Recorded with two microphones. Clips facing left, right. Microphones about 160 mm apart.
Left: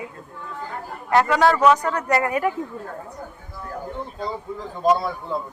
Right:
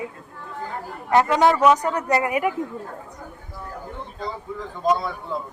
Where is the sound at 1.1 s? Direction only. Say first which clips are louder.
Even; 20° right (ahead or behind).